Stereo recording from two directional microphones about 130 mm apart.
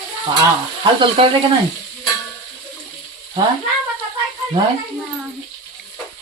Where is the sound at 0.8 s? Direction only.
45° right (ahead or behind).